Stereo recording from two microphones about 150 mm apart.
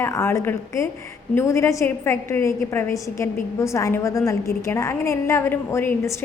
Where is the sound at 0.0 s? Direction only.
15° left (ahead or behind).